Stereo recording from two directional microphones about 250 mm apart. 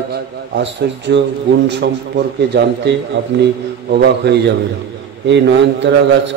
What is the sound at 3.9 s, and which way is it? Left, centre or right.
A man's voice, right.